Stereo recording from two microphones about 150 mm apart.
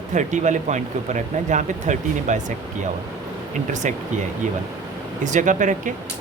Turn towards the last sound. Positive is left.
turn(degrees=-60)  # may be behind; listen again after turning